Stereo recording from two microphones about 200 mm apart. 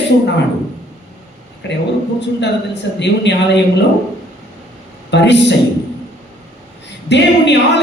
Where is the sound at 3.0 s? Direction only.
60° left (ahead or behind).